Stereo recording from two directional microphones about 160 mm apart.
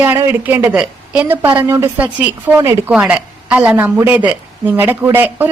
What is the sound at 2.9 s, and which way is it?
A woman's voice, 5° right (ahead or behind).